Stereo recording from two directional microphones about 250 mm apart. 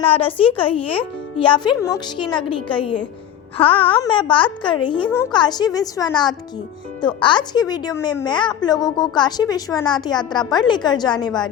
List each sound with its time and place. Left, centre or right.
0.0 s a child's voice: left